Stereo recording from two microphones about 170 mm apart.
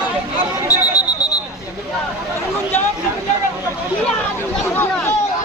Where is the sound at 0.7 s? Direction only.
20° left (ahead or behind).